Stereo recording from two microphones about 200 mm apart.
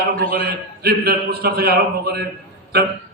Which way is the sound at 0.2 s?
50° right (ahead or behind).